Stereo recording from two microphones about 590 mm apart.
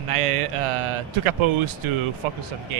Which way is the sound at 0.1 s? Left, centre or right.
Right.